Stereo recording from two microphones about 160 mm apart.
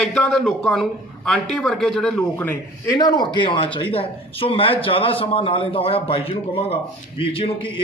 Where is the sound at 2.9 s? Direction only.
25° left (ahead or behind).